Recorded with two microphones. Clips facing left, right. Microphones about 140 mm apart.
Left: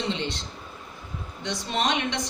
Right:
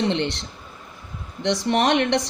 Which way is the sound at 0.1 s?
70° right (ahead or behind).